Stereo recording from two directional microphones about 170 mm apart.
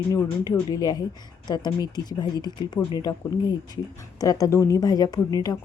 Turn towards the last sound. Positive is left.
turn(degrees=20)  # may be behind; listen again after turning